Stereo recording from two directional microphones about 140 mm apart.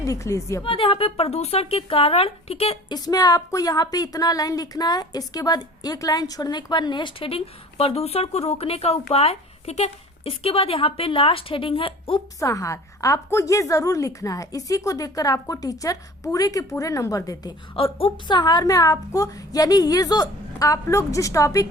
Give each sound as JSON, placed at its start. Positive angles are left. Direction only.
{"t": 0.0, "sound": "a woman's voice", "side_deg": 25}
{"t": 0.6, "sound": "speech", "side_deg": 40}
{"t": 2.9, "sound": "a woman's voice", "side_deg": 25}
{"t": 12.4, "sound": "a woman's voice", "side_deg": 25}
{"t": 17.7, "sound": "a woman's voice", "side_deg": 40}